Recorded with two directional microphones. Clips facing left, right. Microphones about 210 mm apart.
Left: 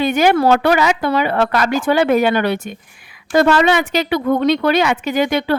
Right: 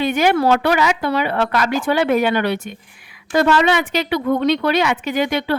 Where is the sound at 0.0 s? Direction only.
45° left (ahead or behind).